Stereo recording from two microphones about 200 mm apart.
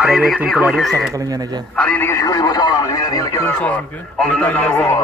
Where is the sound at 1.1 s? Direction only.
20° right (ahead or behind).